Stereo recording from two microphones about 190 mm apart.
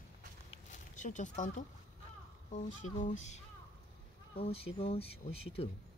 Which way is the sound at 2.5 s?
40° left (ahead or behind).